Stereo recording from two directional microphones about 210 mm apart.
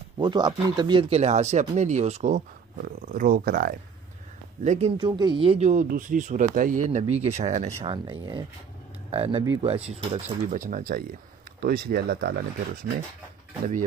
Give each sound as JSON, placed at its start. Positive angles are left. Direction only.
{"t": 0.2, "sound": "speech", "side_deg": -20}
{"t": 4.6, "sound": "speech", "side_deg": -30}